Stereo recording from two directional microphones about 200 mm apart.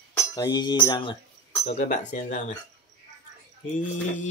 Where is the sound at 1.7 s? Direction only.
35° left (ahead or behind).